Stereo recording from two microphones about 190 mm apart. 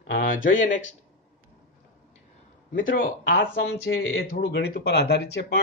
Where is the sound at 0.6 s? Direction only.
40° left (ahead or behind).